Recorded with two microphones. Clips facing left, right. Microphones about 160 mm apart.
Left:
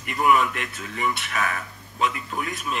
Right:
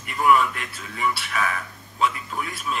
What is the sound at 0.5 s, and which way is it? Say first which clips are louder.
Speech: left 3 dB; 45° left (ahead or behind).